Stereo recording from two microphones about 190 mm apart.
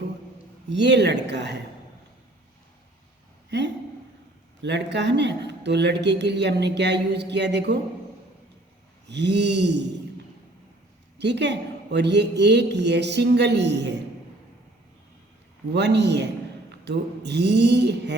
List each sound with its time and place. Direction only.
0.7 s speech: 65° right (ahead or behind)
4.6 s speech: 65° right (ahead or behind)
9.0 s speech: 65° right (ahead or behind)
11.2 s speech: 65° right (ahead or behind)
15.7 s speech: 65° right (ahead or behind)